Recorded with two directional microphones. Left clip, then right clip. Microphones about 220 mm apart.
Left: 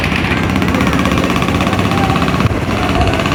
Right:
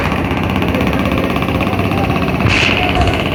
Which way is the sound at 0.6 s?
55° left (ahead or behind).